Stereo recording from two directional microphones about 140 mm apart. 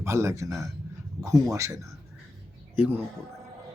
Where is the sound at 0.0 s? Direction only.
20° right (ahead or behind).